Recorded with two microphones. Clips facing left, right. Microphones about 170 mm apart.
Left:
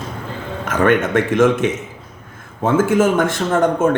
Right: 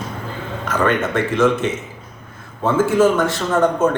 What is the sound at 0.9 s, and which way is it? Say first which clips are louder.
A man's voice: left 5 dB; 50° left (ahead or behind).